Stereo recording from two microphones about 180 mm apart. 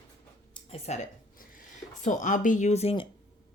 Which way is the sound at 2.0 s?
45° left (ahead or behind).